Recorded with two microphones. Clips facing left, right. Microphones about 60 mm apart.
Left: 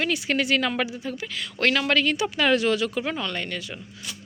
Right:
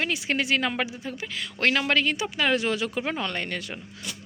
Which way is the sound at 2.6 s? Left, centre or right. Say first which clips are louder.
Left 3 dB; right.